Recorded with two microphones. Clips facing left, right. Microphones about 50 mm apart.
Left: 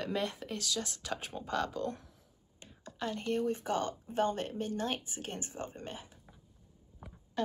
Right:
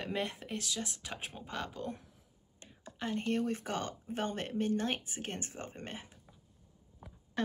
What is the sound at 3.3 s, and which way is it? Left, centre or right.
Speech, right.